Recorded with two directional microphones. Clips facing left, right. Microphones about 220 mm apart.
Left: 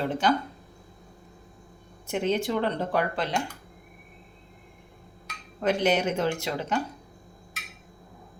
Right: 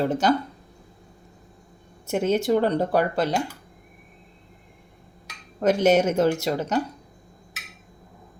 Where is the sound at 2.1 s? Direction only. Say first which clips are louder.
Right 5 dB; 40° right (ahead or behind).